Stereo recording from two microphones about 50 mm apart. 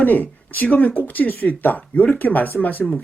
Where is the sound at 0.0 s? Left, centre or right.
Left.